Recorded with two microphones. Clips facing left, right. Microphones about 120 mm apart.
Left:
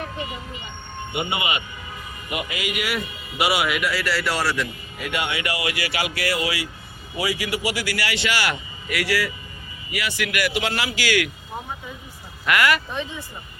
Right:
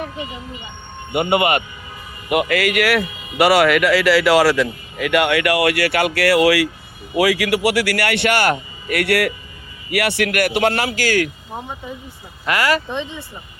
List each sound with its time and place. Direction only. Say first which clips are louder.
1.1 s a man's voice: right 10 dB; 60° right (ahead or behind)
2.3 s a man's voice: right 11 dB; 70° right (ahead or behind); by 11.3 s 45° right (ahead or behind)
12.5 s speech: right 2 dB; 35° right (ahead or behind)
13.0 s speech: right 3 dB; 25° right (ahead or behind)